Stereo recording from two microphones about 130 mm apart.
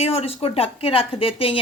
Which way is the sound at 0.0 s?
50° left (ahead or behind).